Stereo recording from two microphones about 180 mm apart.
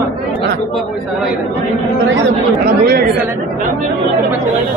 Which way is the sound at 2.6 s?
60° right (ahead or behind).